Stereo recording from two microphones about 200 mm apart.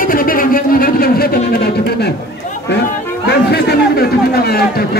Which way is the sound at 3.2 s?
55° left (ahead or behind).